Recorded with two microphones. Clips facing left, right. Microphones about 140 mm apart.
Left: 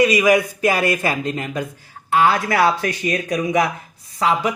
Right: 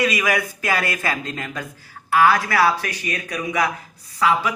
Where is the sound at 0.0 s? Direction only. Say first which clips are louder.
Left 6 dB; 20° left (ahead or behind).